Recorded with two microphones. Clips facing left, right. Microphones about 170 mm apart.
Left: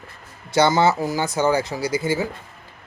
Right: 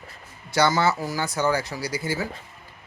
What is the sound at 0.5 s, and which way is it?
Speech, 25° left (ahead or behind).